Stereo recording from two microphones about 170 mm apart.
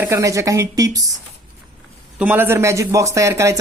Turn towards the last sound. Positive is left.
turn(degrees=-15)  # may be behind; listen again after turning